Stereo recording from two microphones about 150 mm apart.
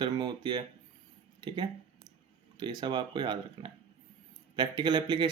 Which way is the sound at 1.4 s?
30° right (ahead or behind).